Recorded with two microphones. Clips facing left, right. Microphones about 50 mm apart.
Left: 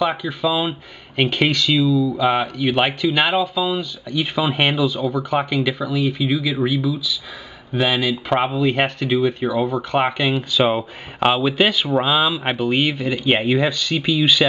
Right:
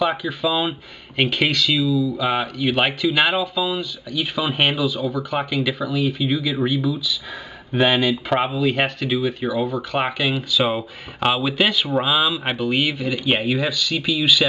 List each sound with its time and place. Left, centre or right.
0.0 s speech: centre
1.9 s speech: centre
2.1 s speech: centre